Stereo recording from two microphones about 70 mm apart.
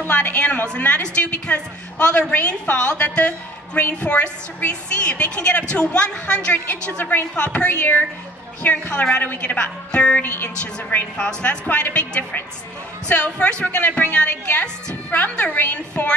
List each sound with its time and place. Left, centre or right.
0.1 s a woman's voice: left
11.1 s a woman's voice: centre